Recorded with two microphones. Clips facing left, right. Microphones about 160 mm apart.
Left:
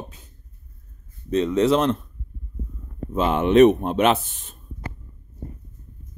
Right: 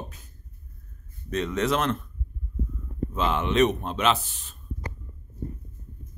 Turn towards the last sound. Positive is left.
turn(degrees=50)  # may be behind; listen again after turning